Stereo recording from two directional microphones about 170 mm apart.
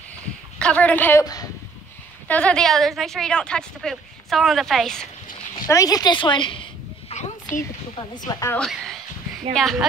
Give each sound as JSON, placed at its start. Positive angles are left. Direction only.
{"t": 0.6, "sound": "a woman's voice", "side_deg": 5}
{"t": 1.2, "sound": "speech", "side_deg": 20}
{"t": 2.2, "sound": "a woman's voice", "side_deg": 5}
{"t": 5.7, "sound": "a sound", "side_deg": 20}
{"t": 7.9, "sound": "a woman's voice", "side_deg": 25}
{"t": 8.5, "sound": "a woman's voice", "side_deg": 0}